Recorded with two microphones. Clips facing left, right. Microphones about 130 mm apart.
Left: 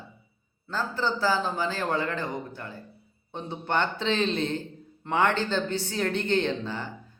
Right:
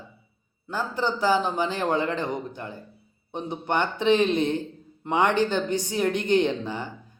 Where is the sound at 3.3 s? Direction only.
15° right (ahead or behind).